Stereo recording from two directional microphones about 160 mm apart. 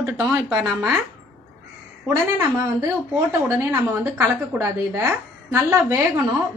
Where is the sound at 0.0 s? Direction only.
10° right (ahead or behind).